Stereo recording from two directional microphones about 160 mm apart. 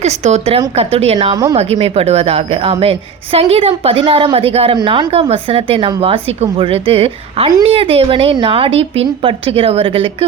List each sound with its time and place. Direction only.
0.0 s a woman's voice: 45° right (ahead or behind)